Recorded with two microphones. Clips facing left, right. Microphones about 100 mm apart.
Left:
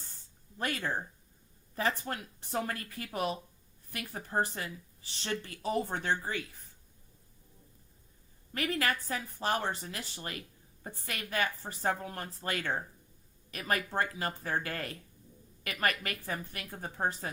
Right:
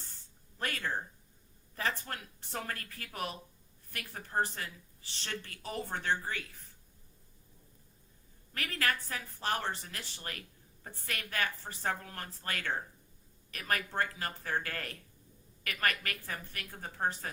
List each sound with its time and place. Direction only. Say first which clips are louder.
0.6 s speech: left 2 dB; 15° left (ahead or behind)
8.5 s a woman's voice: left 3 dB; 20° left (ahead or behind)